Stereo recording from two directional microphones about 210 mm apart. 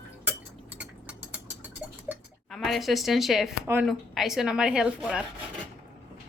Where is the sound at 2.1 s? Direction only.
Centre (ahead or behind).